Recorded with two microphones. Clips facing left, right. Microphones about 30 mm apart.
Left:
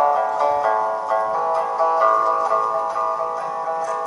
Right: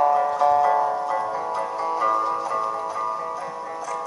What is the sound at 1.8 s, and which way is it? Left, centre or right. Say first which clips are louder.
Music: left 6 dB; left.